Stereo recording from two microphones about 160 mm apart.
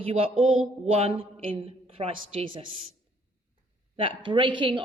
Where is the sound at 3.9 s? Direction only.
30° right (ahead or behind).